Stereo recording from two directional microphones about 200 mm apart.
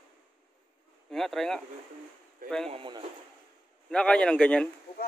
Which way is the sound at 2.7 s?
25° right (ahead or behind).